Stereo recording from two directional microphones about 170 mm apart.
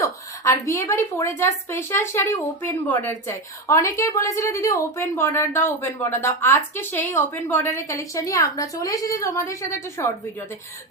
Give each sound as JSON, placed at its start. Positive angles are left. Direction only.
{"t": 0.0, "sound": "a woman's voice", "side_deg": 20}